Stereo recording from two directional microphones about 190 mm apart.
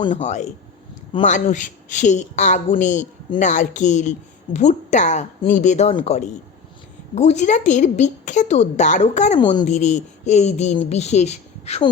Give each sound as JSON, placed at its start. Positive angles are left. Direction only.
{"t": 0.1, "sound": "a woman's voice", "side_deg": 40}
{"t": 5.9, "sound": "speech", "side_deg": 25}
{"t": 7.2, "sound": "a woman's voice", "side_deg": 35}
{"t": 9.4, "sound": "speech", "side_deg": 25}
{"t": 9.6, "sound": "a woman's voice", "side_deg": 35}